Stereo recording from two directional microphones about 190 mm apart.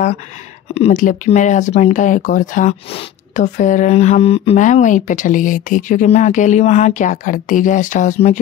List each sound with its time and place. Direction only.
0.7 s speech: 40° left (ahead or behind)